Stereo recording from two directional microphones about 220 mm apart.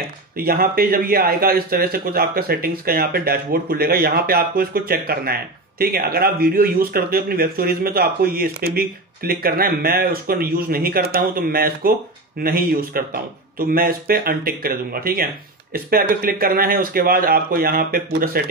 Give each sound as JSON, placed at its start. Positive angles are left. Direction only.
{"t": 0.4, "sound": "speech", "side_deg": -45}